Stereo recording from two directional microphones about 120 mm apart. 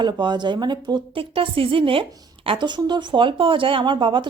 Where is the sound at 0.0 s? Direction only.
40° right (ahead or behind).